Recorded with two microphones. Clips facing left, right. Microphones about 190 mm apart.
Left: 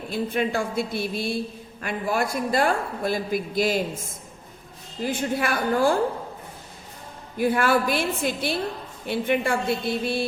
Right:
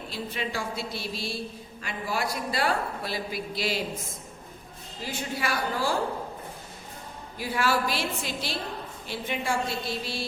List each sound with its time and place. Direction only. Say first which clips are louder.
0.1 s a man's voice: left 9 dB; 50° left (ahead or behind)
5.0 s a man's voice: left 7 dB; 50° left (ahead or behind)
7.3 s a man's voice: left 6 dB; 55° left (ahead or behind)